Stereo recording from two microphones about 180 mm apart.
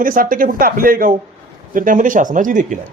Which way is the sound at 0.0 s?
50° right (ahead or behind).